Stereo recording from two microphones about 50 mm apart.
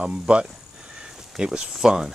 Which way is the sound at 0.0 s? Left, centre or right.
Right.